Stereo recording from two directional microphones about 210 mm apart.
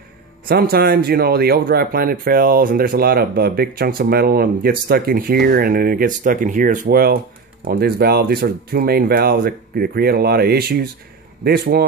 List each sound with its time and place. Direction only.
0.5 s speech: 45° right (ahead or behind)